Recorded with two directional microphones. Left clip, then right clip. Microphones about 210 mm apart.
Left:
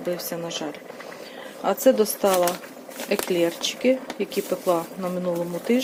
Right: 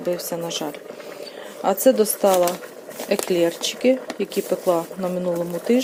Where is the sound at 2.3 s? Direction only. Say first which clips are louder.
Right 3 dB; centre (ahead or behind).